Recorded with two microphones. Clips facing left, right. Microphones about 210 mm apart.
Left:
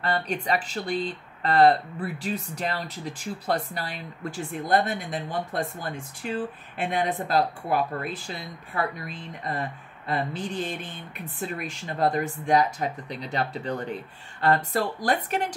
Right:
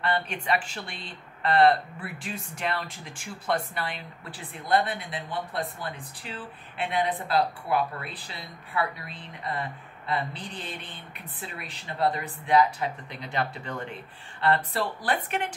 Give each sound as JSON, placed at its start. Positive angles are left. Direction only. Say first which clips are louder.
{"t": 0.0, "sound": "speech", "louder": "left 2 dB", "side_deg": 35}